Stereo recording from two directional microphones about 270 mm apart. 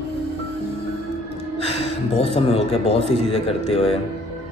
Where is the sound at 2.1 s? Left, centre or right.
Left.